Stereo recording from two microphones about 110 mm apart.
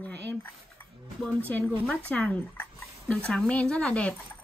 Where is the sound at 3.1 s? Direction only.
10° left (ahead or behind).